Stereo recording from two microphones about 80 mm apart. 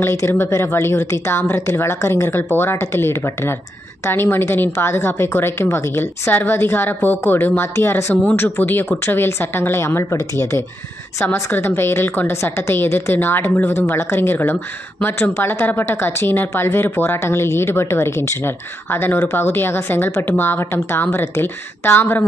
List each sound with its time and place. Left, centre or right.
0.0 s a woman's voice: left